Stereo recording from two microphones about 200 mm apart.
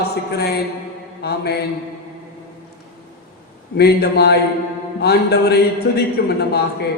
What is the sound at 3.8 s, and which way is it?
A man's voice, 55° left (ahead or behind).